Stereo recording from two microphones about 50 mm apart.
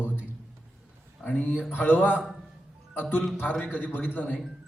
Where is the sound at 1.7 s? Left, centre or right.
Left.